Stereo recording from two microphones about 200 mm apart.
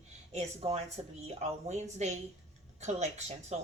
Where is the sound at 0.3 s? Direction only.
30° right (ahead or behind).